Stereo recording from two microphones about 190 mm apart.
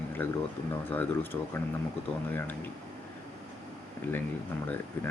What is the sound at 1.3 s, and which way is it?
Speech, 10° left (ahead or behind).